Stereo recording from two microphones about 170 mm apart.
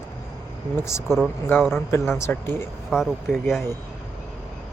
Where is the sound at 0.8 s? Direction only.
15° left (ahead or behind).